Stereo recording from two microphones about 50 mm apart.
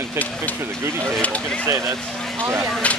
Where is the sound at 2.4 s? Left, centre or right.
Right.